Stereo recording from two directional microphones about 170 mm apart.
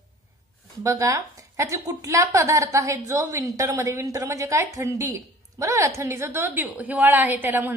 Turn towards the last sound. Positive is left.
turn(degrees=-10)  # may be behind; listen again after turning